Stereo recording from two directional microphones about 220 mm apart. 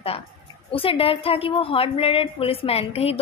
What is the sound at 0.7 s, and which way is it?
A woman's voice, 25° left (ahead or behind).